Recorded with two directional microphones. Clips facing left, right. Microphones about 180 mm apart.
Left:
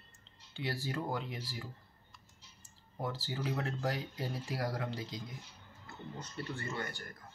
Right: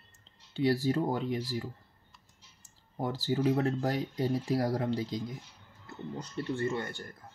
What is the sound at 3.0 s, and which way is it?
Speech, 40° right (ahead or behind).